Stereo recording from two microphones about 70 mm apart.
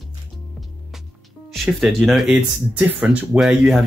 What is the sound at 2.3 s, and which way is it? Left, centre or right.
Speech, centre.